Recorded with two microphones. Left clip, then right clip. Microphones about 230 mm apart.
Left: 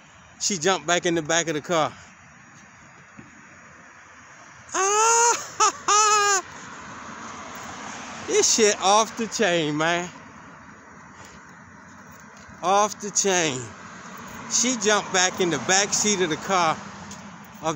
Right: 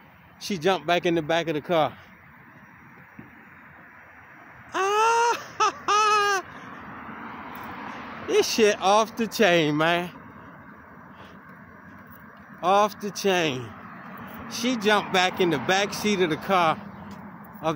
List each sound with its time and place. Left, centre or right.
0.4 s speech: centre
4.6 s baby cry: centre
5.9 s a sound: centre
6.4 s vehicle: left
8.3 s speech: centre
9.2 s speech: centre
12.5 s speech: centre
13.9 s a sound: left
14.5 s speech: centre